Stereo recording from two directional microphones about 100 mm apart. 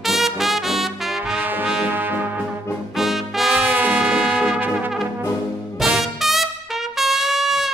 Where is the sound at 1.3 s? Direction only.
15° right (ahead or behind).